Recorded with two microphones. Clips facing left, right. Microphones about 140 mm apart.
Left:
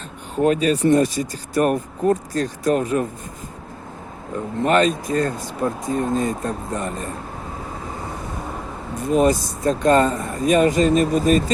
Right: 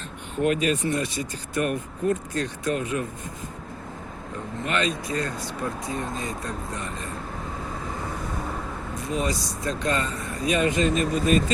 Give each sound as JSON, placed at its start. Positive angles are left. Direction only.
{"t": 0.3, "sound": "speech", "side_deg": 35}
{"t": 4.6, "sound": "speech", "side_deg": 45}
{"t": 9.0, "sound": "speech", "side_deg": 50}